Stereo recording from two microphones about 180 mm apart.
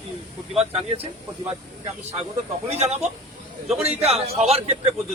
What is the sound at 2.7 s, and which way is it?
A man's voice, 35° right (ahead or behind).